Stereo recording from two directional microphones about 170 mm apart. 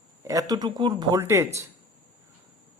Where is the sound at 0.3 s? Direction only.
20° right (ahead or behind).